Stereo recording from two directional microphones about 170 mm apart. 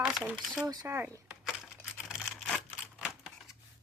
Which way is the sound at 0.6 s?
20° right (ahead or behind).